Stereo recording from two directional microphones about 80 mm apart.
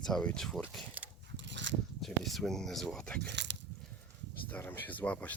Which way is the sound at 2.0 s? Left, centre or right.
Centre.